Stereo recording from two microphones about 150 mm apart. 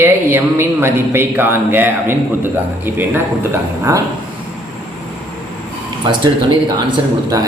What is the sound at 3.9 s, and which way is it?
Speech, 20° right (ahead or behind).